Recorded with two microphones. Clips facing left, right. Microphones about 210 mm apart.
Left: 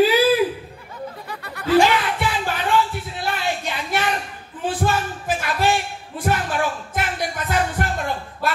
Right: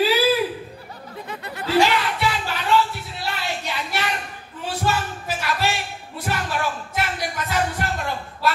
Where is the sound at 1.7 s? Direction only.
50° left (ahead or behind).